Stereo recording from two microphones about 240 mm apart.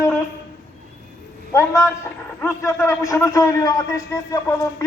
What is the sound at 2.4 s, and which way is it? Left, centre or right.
A man's voice, centre.